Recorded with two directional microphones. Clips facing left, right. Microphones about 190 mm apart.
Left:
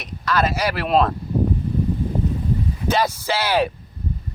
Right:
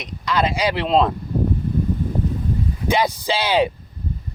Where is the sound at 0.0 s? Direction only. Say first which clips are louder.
Even; 15° right (ahead or behind).